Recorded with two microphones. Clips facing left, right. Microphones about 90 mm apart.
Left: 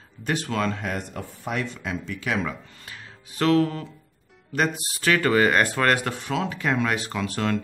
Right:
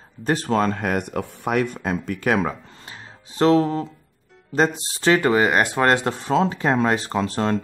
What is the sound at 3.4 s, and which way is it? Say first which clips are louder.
Speech: right 4 dB; 25° right (ahead or behind).